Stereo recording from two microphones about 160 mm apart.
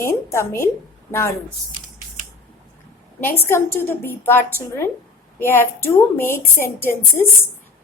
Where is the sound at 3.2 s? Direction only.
15° left (ahead or behind).